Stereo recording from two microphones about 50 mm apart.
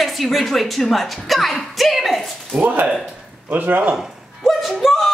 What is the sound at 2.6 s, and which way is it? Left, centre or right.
Speech, right.